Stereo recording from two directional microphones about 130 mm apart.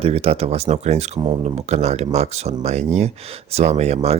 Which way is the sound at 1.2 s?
45° right (ahead or behind).